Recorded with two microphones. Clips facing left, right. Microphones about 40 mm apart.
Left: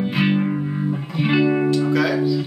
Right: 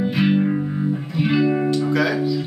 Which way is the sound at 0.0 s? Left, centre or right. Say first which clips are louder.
Right 1 dB; centre.